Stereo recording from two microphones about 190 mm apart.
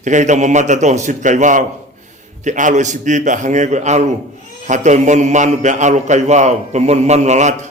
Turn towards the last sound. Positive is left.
turn(degrees=-40)  # may be behind; listen again after turning